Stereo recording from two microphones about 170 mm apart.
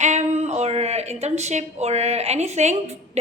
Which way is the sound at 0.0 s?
45° right (ahead or behind).